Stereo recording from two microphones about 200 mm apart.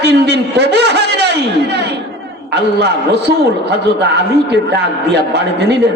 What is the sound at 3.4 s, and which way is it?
A man's voice, 55° right (ahead or behind).